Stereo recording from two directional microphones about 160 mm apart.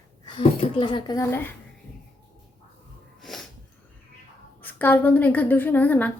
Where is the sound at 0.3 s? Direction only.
35° left (ahead or behind).